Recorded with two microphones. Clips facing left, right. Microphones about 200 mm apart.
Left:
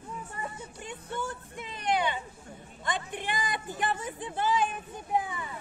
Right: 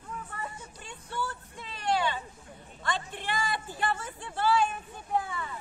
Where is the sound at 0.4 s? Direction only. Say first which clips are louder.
Left 2 dB; 20° left (ahead or behind).